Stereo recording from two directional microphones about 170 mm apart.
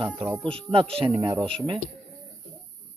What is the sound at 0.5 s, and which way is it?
Speech, 30° right (ahead or behind).